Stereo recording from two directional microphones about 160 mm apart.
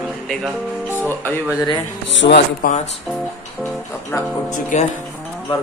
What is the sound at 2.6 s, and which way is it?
Speech, 65° left (ahead or behind).